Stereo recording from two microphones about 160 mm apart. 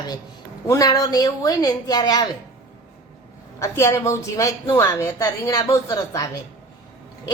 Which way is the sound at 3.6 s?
20° left (ahead or behind).